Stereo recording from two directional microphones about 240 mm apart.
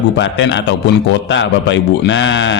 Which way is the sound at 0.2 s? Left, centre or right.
Left.